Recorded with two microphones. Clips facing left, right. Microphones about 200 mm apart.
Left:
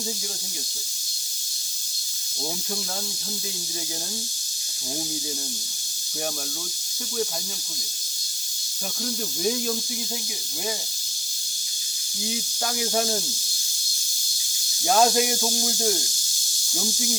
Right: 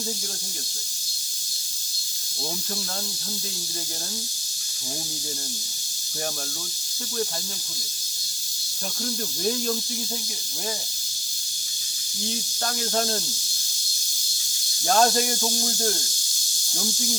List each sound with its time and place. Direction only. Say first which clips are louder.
9.0 s speech: left 1 dB; 5° left (ahead or behind)
12.3 s speech: left 1 dB; 10° left (ahead or behind)
14.8 s speech: left 1 dB; 10° left (ahead or behind)